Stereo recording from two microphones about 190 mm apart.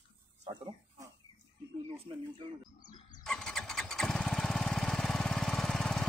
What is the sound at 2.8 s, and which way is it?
Bird, 20° left (ahead or behind).